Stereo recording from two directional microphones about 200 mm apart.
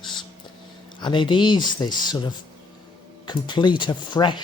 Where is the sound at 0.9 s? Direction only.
25° left (ahead or behind).